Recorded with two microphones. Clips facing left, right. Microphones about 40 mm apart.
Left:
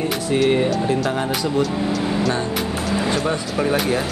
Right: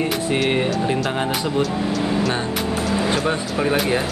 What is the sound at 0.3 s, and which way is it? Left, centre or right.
Speech, right.